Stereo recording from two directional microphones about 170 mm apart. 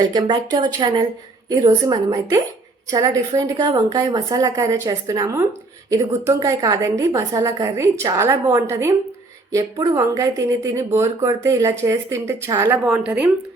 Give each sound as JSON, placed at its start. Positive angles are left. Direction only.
{"t": 0.1, "sound": "a woman's voice", "side_deg": -25}